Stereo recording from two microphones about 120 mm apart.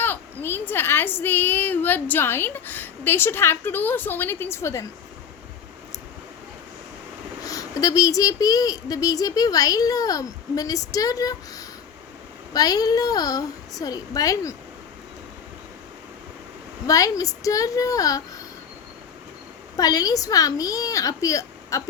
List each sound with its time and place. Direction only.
0.0 s a child's voice: 15° left (ahead or behind)
7.4 s a woman's voice: 30° left (ahead or behind)
16.8 s speech: 30° left (ahead or behind)
19.7 s speech: 30° left (ahead or behind)